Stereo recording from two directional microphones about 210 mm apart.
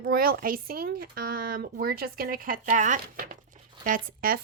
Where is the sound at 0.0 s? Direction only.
45° right (ahead or behind).